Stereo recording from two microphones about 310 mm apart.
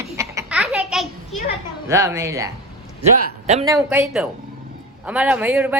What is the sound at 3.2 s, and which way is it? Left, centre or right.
Speech, right.